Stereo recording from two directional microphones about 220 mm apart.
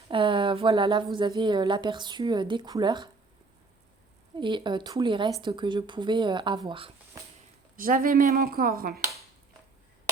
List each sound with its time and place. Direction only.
0.1 s speech: 20° right (ahead or behind)
4.4 s speech: 20° right (ahead or behind)
7.8 s speech: 40° right (ahead or behind)